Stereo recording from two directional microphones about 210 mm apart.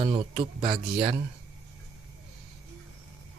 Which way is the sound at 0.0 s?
25° right (ahead or behind).